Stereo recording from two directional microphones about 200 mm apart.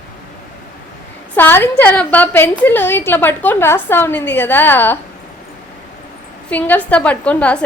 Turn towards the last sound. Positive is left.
turn(degrees=5)  # may be behind; listen again after turning